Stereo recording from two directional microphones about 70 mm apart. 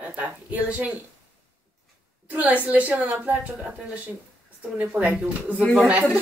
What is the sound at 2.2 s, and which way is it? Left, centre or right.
Speech, right.